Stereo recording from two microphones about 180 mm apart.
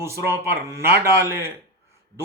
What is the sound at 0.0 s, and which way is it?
Speech, 15° right (ahead or behind).